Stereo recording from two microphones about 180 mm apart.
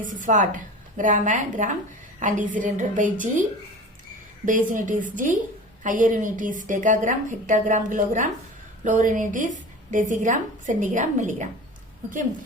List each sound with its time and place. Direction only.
0.0 s a woman's voice: 45° right (ahead or behind)
4.7 s a woman's voice: 45° right (ahead or behind)